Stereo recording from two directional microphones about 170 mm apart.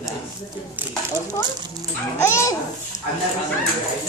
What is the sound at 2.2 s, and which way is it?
Speech, 15° left (ahead or behind).